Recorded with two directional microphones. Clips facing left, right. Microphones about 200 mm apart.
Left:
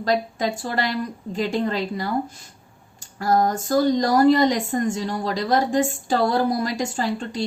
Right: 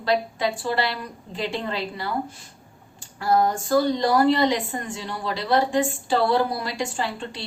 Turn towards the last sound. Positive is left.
turn(degrees=45)  # may be behind; listen again after turning